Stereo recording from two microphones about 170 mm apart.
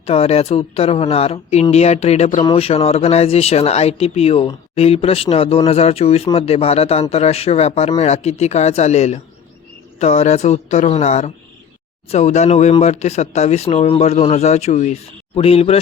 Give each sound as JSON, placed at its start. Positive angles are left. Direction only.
{"t": 0.0, "sound": "speech", "side_deg": 35}